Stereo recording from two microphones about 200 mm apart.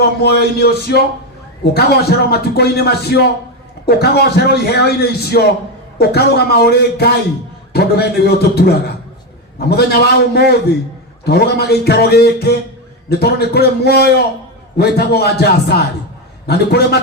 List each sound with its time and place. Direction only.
0.2 s a man's voice: 55° left (ahead or behind)